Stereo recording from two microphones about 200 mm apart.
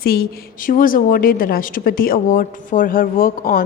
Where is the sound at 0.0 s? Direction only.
50° left (ahead or behind).